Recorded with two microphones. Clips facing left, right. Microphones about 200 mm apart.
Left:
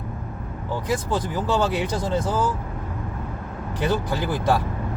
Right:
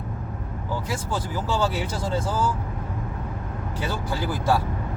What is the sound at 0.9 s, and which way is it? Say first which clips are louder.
Speech: left 9 dB; 20° left (ahead or behind).